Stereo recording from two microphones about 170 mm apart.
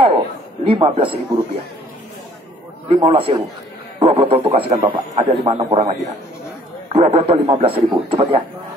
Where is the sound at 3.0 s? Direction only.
35° right (ahead or behind).